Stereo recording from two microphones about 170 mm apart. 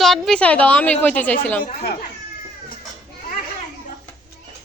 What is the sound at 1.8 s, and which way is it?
Speech, 65° left (ahead or behind).